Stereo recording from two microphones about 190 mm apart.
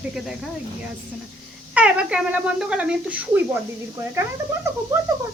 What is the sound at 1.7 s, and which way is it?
Speech, 5° right (ahead or behind).